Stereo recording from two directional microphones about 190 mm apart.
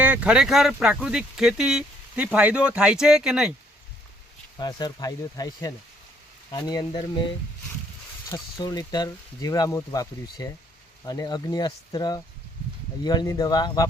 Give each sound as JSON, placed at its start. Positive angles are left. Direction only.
{"t": 0.0, "sound": "speech", "side_deg": -5}
{"t": 4.5, "sound": "speech", "side_deg": 20}
{"t": 8.3, "sound": "speech", "side_deg": 20}